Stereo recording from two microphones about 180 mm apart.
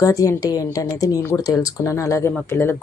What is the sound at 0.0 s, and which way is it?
Speech, 20° left (ahead or behind).